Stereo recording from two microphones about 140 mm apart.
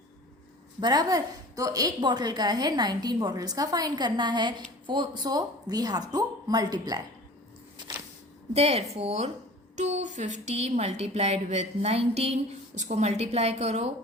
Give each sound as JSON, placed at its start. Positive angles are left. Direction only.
{"t": 0.8, "sound": "a woman's voice", "side_deg": -30}
{"t": 8.5, "sound": "speech", "side_deg": -50}
{"t": 9.7, "sound": "speech", "side_deg": -55}